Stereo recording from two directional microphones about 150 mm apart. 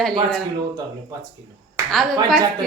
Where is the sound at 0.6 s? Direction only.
25° right (ahead or behind).